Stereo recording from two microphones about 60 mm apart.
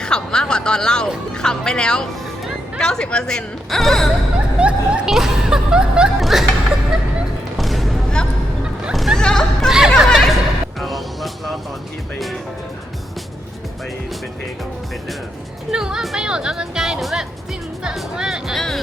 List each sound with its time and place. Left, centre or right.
0.0 s a sound: centre
1.4 s speech: centre
4.5 s speech: centre
5.1 s music: centre
6.1 s music: centre
7.6 s a sound: centre
9.1 s hubbub: centre
9.6 s a sound: centre
10.1 s a sound: centre
10.8 s music: centre
15.7 s speech: centre
18.5 s speech: centre